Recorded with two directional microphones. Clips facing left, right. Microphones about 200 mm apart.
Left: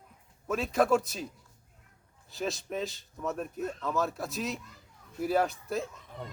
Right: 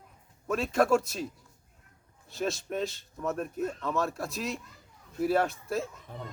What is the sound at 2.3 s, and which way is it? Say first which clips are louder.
A man's voice: right 2 dB; centre (ahead or behind).